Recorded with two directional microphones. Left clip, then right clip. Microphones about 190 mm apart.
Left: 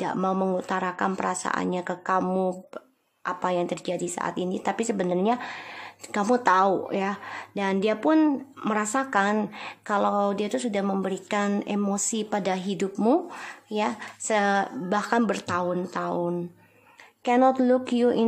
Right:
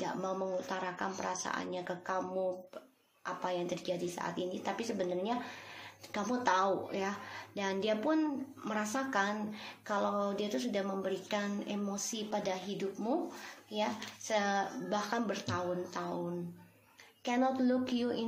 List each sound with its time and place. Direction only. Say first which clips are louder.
0.0 s speech: left 10 dB; 40° left (ahead or behind)
13.7 s speech: left 8 dB; 45° left (ahead or behind)
17.2 s speech: left 12 dB; 35° left (ahead or behind)